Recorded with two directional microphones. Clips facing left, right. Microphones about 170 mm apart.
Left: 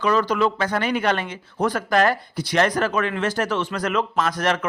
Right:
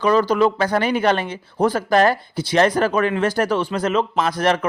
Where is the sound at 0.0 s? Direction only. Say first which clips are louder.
Right 4 dB; 35° right (ahead or behind).